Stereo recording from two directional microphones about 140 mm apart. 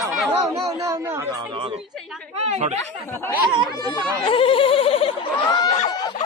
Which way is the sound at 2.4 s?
50° right (ahead or behind).